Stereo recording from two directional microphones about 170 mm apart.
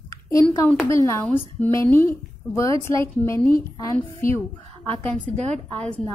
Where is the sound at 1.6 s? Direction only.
15° left (ahead or behind).